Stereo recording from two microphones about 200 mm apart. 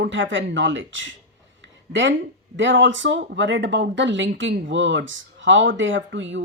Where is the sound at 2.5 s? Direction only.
70° right (ahead or behind).